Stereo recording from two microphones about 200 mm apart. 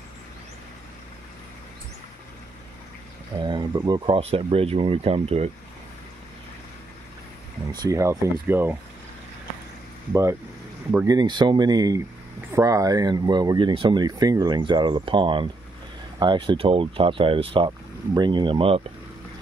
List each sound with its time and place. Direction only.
3.3 s speech: 20° right (ahead or behind)
7.7 s speech: 20° right (ahead or behind)
10.9 s speech: 15° right (ahead or behind)